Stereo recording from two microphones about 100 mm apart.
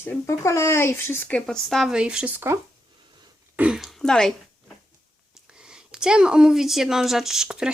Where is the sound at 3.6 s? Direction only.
5° right (ahead or behind).